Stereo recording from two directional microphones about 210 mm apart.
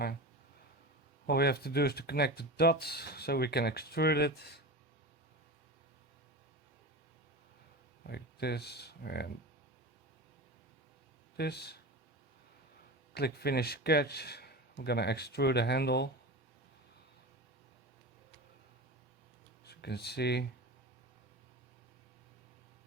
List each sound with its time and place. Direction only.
1.3 s speech: 50° left (ahead or behind)
8.0 s speech: 50° left (ahead or behind)
11.3 s speech: 50° left (ahead or behind)
13.1 s speech: 50° left (ahead or behind)
19.6 s speech: 50° left (ahead or behind)